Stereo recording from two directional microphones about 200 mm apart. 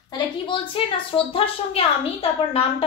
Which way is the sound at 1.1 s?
30° left (ahead or behind).